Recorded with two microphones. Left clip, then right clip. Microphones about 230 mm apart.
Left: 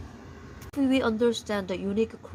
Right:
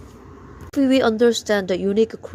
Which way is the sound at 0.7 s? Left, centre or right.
Right.